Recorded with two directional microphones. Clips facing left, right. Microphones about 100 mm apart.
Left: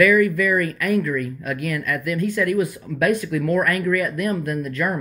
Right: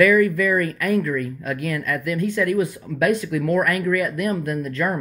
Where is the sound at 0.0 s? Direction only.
35° right (ahead or behind).